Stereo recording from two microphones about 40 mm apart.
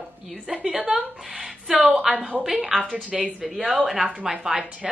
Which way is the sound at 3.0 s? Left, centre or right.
Right.